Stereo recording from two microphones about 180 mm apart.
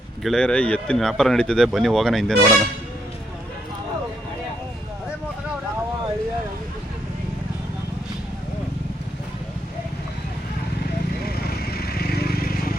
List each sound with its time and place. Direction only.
0.2 s speech: centre (ahead or behind)
11.3 s vehicle: 60° left (ahead or behind)